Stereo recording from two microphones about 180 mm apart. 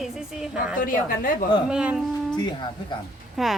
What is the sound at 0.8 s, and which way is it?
Speech, 50° left (ahead or behind).